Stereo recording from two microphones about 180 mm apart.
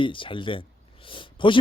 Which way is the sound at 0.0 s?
30° left (ahead or behind).